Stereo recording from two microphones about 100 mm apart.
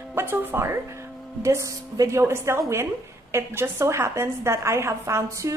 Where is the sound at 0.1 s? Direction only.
20° right (ahead or behind).